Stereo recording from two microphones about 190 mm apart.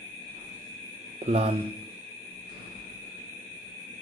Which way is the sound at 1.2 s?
35° right (ahead or behind).